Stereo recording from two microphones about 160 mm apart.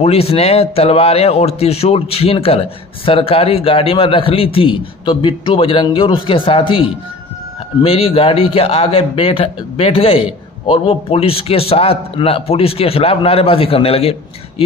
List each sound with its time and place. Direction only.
0.0 s a man's voice: 40° left (ahead or behind)